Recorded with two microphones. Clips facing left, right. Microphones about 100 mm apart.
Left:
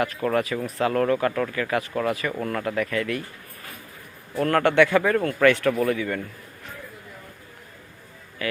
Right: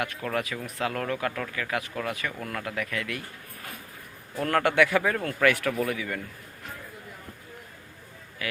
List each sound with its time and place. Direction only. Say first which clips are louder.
0.0 s speech: left 6 dB; 5° left (ahead or behind)
4.4 s speech: left 4 dB; 10° right (ahead or behind)
8.4 s a sound: left 6 dB; 5° right (ahead or behind)